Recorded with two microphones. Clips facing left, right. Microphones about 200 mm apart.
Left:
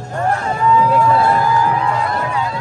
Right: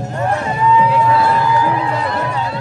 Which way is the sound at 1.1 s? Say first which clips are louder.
Even; 50° left (ahead or behind).